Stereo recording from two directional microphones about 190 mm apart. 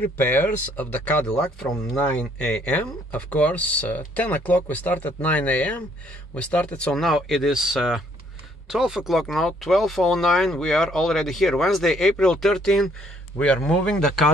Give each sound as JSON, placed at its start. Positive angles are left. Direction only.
{"t": 0.0, "sound": "speech", "side_deg": 10}